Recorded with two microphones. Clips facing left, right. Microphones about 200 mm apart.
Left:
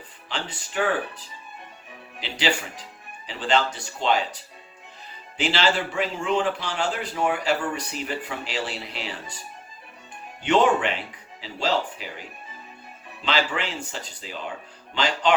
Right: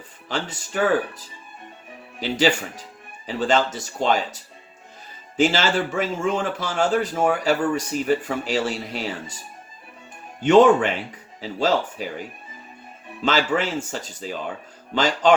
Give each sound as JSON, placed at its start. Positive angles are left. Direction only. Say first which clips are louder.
{"t": 0.3, "sound": "a man's voice", "louder": "right 5 dB", "side_deg": -45}
{"t": 5.4, "sound": "a man's voice", "louder": "right 4 dB", "side_deg": -45}
{"t": 10.4, "sound": "a man's voice", "louder": "right 6 dB", "side_deg": -45}
{"t": 13.2, "sound": "a man's voice", "louder": "right 5 dB", "side_deg": -45}